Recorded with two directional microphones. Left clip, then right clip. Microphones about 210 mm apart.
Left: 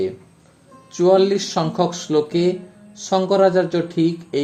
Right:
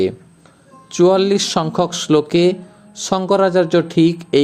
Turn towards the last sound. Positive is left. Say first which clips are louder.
# right 6 dB
turn(degrees=-30)  # may be behind; listen again after turning